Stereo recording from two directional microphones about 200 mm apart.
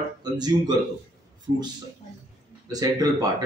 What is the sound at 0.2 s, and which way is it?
Speech, 20° right (ahead or behind).